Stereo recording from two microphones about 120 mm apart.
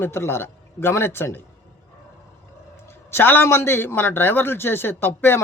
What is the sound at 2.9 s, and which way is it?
Speech, 20° left (ahead or behind).